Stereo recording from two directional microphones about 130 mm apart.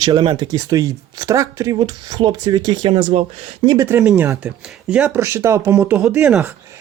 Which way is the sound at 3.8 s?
15° right (ahead or behind).